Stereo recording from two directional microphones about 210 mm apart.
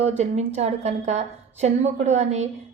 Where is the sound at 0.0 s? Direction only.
30° right (ahead or behind).